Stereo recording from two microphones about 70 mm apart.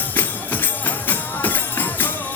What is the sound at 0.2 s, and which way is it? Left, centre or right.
Music, left.